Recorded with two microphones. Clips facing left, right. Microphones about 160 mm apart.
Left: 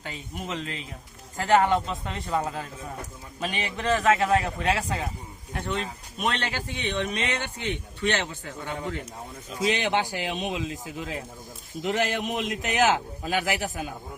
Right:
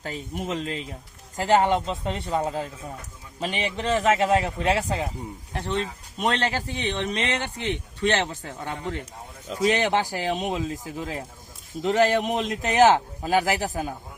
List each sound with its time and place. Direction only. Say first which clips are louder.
0.0 s a man's voice: right 5 dB; 40° right (ahead or behind)
6.2 s a man's voice: right 4 dB; 35° right (ahead or behind)
9.6 s a man's voice: right 3 dB; 40° right (ahead or behind)